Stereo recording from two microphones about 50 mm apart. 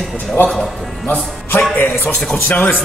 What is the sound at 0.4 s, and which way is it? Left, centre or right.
Speech, left.